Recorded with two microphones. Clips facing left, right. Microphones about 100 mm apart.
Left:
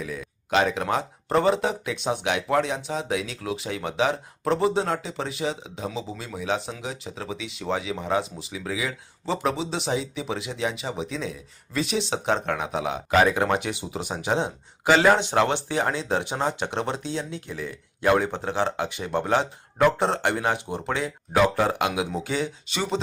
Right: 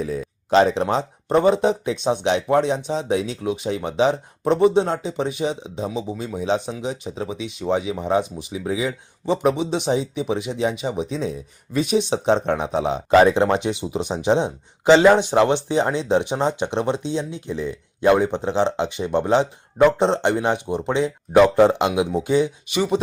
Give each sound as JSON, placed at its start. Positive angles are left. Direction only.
{"t": 0.0, "sound": "speech", "side_deg": -35}